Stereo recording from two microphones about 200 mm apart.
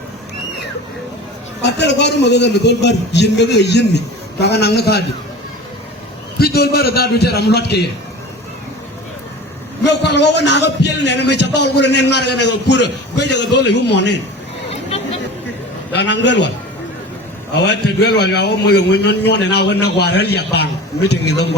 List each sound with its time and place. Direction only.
1.6 s a man's voice: 60° left (ahead or behind)
6.4 s a man's voice: 50° left (ahead or behind)
9.8 s a man's voice: 60° left (ahead or behind)
16.0 s a man's voice: 60° left (ahead or behind)
17.7 s a man's voice: 55° left (ahead or behind)